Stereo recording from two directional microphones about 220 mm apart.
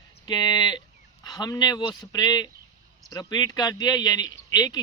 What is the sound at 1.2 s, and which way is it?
Speech, 15° left (ahead or behind).